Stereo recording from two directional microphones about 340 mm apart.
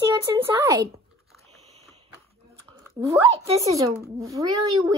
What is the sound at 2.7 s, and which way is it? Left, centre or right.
Speech, centre.